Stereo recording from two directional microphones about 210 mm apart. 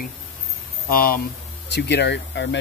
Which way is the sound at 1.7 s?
55° left (ahead or behind).